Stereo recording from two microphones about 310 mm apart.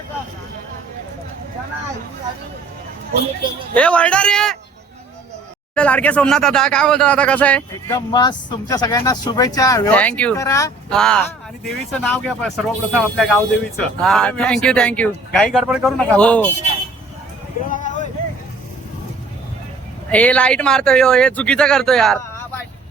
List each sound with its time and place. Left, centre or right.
3.8 s speech: centre
5.7 s speech: centre
17.7 s vehicle: left
20.1 s speech: centre